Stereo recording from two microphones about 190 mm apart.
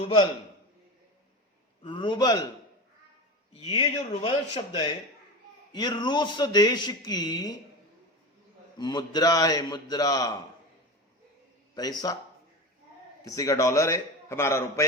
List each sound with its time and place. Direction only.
0.0 s a man's voice: 30° left (ahead or behind)
1.8 s a man's voice: 25° left (ahead or behind)
3.5 s a man's voice: 30° left (ahead or behind)
8.8 s a man's voice: 20° left (ahead or behind)
11.7 s a man's voice: 20° left (ahead or behind)
13.2 s a man's voice: 20° left (ahead or behind)